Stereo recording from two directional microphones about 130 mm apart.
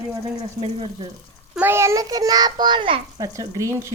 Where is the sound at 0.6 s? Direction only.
50° right (ahead or behind).